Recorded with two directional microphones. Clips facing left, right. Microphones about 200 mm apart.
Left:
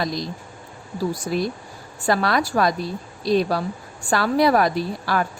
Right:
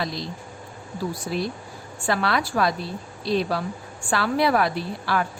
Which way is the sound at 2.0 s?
40° left (ahead or behind).